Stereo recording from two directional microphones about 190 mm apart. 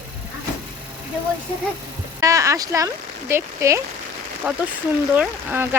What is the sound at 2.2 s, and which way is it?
Speech, 15° right (ahead or behind).